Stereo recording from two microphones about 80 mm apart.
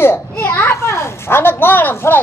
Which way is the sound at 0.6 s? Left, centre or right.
Left.